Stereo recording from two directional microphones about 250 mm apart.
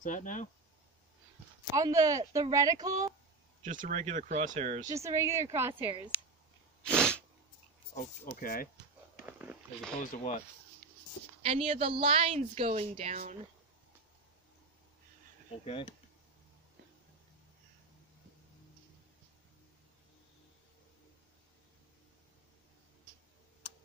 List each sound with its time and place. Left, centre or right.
0.0 s speech: left
1.8 s speech: centre
3.6 s a woman's voice: right
4.8 s speech: centre
6.8 s sneeze: centre
8.4 s speech: left
9.2 s a sound: centre
9.9 s speech: left
11.4 s a woman's voice: right
15.6 s speech: left